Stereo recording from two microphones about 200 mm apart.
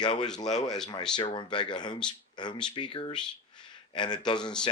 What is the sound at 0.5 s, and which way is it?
Speech, centre (ahead or behind).